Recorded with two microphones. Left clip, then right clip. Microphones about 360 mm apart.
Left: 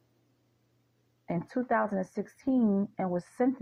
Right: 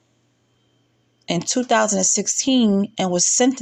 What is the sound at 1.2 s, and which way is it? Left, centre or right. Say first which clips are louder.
Speech: right 12 dB; left.